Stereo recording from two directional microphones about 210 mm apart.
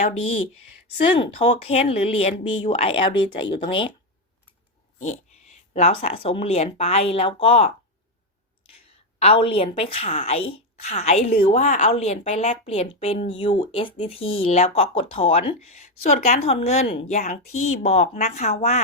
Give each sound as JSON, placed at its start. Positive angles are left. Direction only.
{"t": 0.0, "sound": "speech", "side_deg": 25}
{"t": 5.7, "sound": "speech", "side_deg": 30}
{"t": 9.1, "sound": "speech", "side_deg": 25}